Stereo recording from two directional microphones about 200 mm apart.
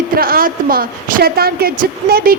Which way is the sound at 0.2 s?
45° right (ahead or behind).